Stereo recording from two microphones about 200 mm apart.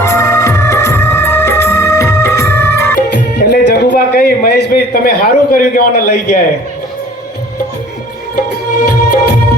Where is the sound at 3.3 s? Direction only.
55° left (ahead or behind).